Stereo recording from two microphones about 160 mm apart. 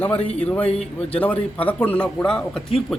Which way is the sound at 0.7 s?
40° left (ahead or behind).